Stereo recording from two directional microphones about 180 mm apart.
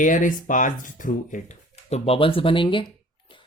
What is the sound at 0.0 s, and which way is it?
Speech, 45° left (ahead or behind).